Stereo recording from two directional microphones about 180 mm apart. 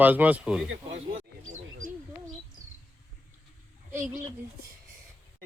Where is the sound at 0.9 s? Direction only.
45° right (ahead or behind).